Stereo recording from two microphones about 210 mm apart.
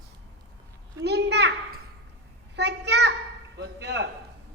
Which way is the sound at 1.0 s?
55° right (ahead or behind).